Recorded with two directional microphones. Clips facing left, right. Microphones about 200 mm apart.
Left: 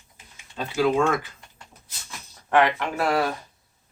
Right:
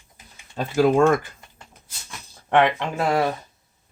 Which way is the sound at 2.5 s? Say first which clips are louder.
Right 2 dB; 20° right (ahead or behind).